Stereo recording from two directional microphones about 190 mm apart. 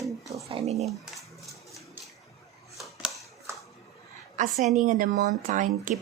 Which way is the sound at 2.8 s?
Centre (ahead or behind).